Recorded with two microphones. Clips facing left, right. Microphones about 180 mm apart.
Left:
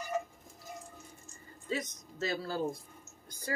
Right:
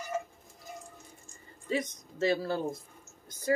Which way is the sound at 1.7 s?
25° right (ahead or behind).